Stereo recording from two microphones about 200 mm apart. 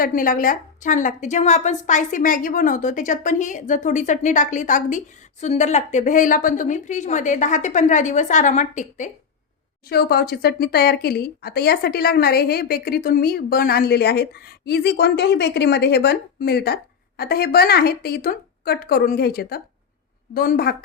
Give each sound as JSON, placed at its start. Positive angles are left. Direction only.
{"t": 0.0, "sound": "a woman's voice", "side_deg": 45}
{"t": 9.9, "sound": "speech", "side_deg": 55}